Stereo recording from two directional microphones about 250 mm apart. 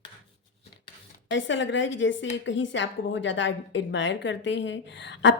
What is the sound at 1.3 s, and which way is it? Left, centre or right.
A woman's voice, left.